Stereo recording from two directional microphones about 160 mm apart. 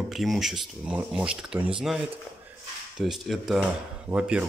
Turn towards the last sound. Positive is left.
turn(degrees=-5)  # may be behind; listen again after turning